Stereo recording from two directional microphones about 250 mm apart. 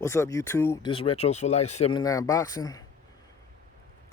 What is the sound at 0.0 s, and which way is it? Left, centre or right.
Speech, centre.